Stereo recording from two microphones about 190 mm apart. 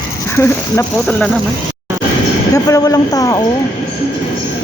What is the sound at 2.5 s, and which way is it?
Speech, 20° left (ahead or behind).